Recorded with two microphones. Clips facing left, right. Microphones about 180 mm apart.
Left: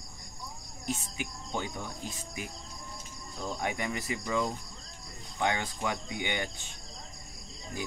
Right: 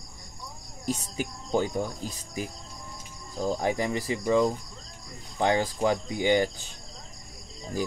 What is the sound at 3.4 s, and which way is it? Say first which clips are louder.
Speech: right 7 dB; 30° right (ahead or behind).